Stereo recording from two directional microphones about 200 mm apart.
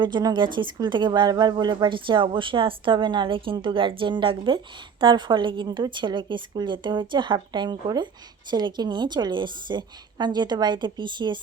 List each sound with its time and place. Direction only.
0.0 s speech: 20° right (ahead or behind)